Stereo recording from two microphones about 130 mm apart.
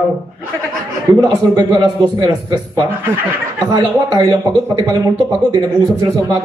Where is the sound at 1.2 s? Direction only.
30° right (ahead or behind).